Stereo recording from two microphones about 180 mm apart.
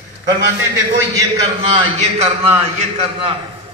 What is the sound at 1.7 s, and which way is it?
A man's voice, 30° right (ahead or behind).